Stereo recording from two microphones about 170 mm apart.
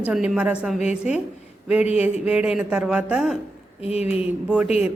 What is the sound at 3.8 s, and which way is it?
Speech, 35° left (ahead or behind).